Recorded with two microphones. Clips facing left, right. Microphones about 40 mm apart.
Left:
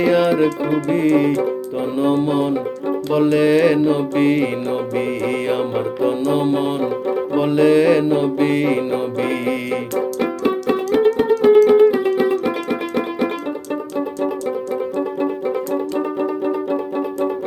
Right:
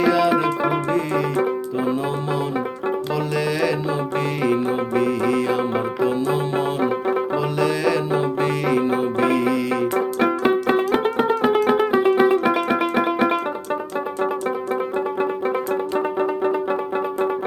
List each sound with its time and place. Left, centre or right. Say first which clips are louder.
2.0 s music: left 7 dB; left
5.7 s music: left 2 dB; left
7.3 s music: left 7 dB; left
10.4 s music: left 1 dB; right
15.2 s music: left 1 dB; right